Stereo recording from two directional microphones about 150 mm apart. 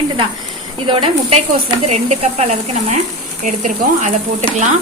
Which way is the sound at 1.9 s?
50° right (ahead or behind).